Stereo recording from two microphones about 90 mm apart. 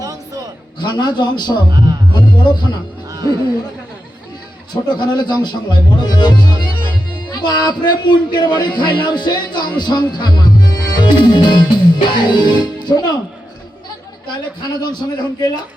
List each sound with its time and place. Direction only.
0.0 s a sound: 40° right (ahead or behind)
0.8 s a man's voice: 50° left (ahead or behind)
1.7 s speech: 50° right (ahead or behind)
2.1 s speech: 55° left (ahead or behind)
3.1 s music: 45° right (ahead or behind)
4.7 s speech: 55° left (ahead or behind)
14.8 s a man's voice: 50° left (ahead or behind)